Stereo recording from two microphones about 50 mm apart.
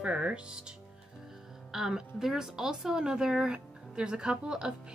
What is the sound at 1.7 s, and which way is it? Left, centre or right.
Speech, centre.